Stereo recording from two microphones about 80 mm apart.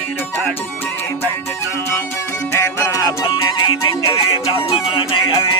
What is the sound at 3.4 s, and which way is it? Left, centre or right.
Music, left.